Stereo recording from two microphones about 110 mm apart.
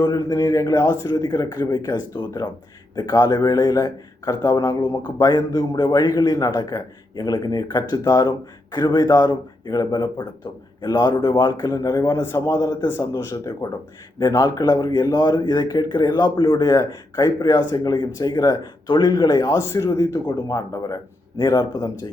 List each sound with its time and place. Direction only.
0.0 s speech: 35° left (ahead or behind)